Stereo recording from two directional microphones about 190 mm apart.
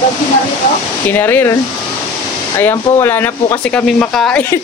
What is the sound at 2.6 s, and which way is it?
Speech, 10° left (ahead or behind).